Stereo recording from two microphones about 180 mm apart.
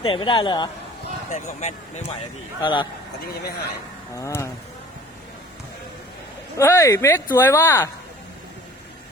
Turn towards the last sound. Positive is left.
turn(degrees=15)  # may be behind; listen again after turning